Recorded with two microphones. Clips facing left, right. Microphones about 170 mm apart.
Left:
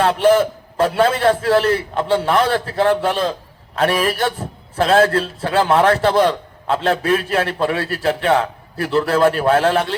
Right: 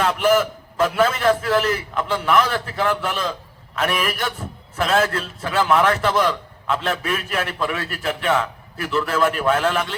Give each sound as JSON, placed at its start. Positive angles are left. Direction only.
{"t": 0.0, "sound": "a man's voice", "side_deg": 30}